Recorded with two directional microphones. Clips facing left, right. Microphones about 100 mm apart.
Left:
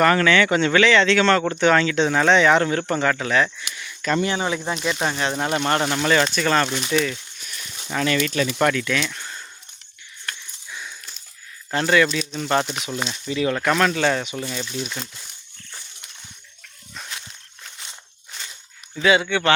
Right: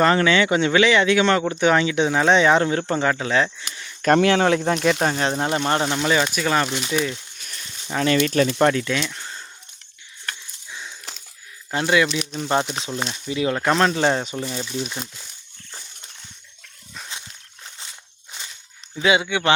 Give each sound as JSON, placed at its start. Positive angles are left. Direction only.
{"t": 0.0, "sound": "speech", "side_deg": -20}
{"t": 3.6, "sound": "cricket", "side_deg": -35}
{"t": 4.2, "sound": "speech", "side_deg": -80}
{"t": 4.9, "sound": "speech", "side_deg": -40}
{"t": 5.5, "sound": "speech", "side_deg": -20}
{"t": 6.1, "sound": "speech", "side_deg": -10}
{"t": 7.9, "sound": "speech", "side_deg": -30}
{"t": 10.7, "sound": "dog", "side_deg": -25}
{"t": 11.7, "sound": "speech", "side_deg": -15}
{"t": 12.9, "sound": "speech", "side_deg": 0}
{"t": 13.2, "sound": "speech", "side_deg": -20}
{"t": 17.1, "sound": "a sound", "side_deg": -25}
{"t": 18.9, "sound": "speech", "side_deg": -20}